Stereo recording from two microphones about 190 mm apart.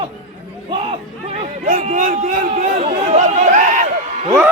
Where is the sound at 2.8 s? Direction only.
35° right (ahead or behind).